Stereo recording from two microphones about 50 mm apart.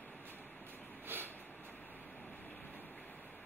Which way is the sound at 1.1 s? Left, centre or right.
Right.